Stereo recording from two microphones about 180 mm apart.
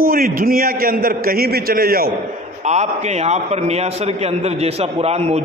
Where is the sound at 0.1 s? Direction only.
55° right (ahead or behind).